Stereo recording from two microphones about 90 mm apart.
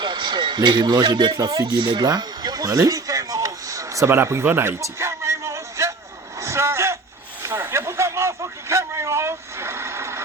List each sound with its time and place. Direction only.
0.0 s speech: 60° right (ahead or behind)
1.6 s speech: 60° right (ahead or behind); by 4.7 s 25° right (ahead or behind)
4.8 s a sound: 30° right (ahead or behind)